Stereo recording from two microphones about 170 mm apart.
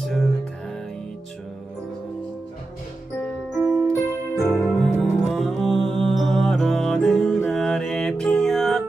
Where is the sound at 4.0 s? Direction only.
15° left (ahead or behind).